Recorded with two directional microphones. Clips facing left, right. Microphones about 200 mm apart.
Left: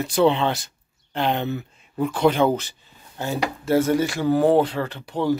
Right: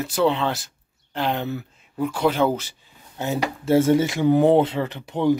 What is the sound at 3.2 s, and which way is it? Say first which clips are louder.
Speech: right 1 dB; 25° right (ahead or behind).